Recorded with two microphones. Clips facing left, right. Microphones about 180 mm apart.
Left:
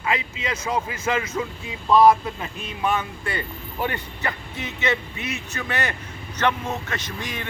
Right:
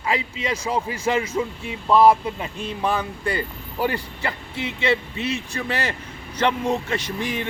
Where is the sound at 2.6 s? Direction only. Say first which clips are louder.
Even; 35° right (ahead or behind).